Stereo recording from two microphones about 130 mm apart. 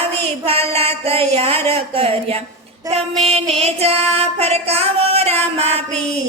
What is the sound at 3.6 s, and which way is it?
Child singing, 50° right (ahead or behind).